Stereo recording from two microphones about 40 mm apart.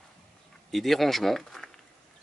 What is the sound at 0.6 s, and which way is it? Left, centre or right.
Speech, centre.